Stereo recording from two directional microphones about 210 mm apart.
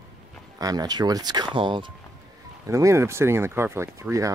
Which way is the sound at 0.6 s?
20° right (ahead or behind).